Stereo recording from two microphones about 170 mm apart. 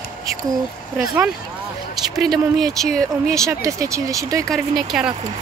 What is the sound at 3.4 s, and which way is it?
Speech, 20° right (ahead or behind).